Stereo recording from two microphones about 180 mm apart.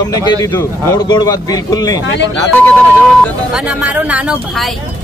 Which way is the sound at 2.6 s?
10° left (ahead or behind).